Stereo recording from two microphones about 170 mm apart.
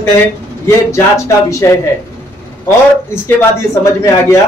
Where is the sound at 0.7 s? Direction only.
15° left (ahead or behind).